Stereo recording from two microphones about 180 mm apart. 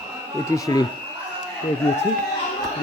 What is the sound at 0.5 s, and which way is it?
Speech, 20° left (ahead or behind).